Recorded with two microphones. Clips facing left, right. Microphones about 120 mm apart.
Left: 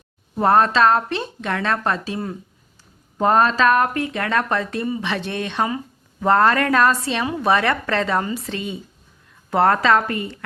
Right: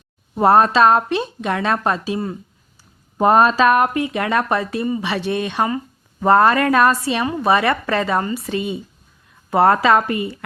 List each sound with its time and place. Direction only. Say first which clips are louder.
0.3 s speech: right 3 dB; 15° right (ahead or behind)
3.2 s a woman's voice: right 3 dB; 15° right (ahead or behind)